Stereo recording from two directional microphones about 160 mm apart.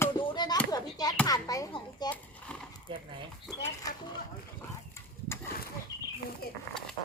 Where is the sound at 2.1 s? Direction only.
10° left (ahead or behind).